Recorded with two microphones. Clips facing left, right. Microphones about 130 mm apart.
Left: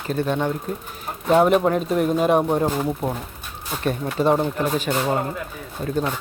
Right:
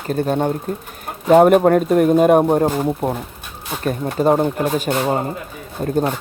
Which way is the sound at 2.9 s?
30° right (ahead or behind).